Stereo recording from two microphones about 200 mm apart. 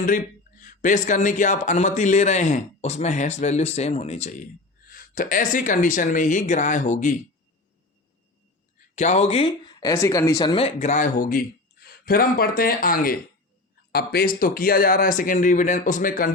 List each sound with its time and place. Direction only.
0.0 s speech: 40° left (ahead or behind)
9.0 s speech: 35° left (ahead or behind)